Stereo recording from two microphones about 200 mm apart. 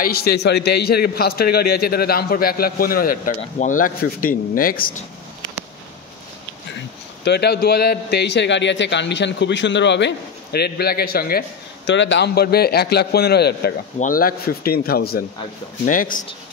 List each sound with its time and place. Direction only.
0.0 s a man's voice: 50° left (ahead or behind)
7.2 s a man's voice: 55° left (ahead or behind)
13.9 s a man's voice: 45° left (ahead or behind)